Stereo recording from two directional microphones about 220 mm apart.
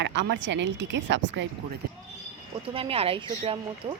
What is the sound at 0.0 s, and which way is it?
A woman's voice, 50° right (ahead or behind).